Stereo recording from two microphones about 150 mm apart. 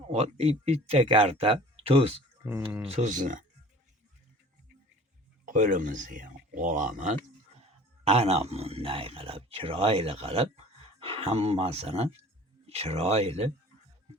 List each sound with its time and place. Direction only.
0.1 s speech: 45° right (ahead or behind)
2.4 s speech: 10° right (ahead or behind)
2.9 s speech: 55° right (ahead or behind)
5.5 s speech: 60° right (ahead or behind)
7.6 s speech: 45° right (ahead or behind)